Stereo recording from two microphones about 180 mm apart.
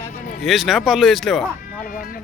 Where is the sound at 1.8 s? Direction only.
50° left (ahead or behind).